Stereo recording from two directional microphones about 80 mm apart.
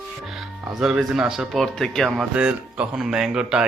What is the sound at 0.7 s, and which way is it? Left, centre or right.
Speech, centre.